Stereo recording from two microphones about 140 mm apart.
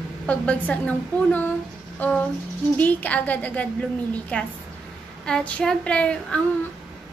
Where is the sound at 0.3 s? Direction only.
10° left (ahead or behind).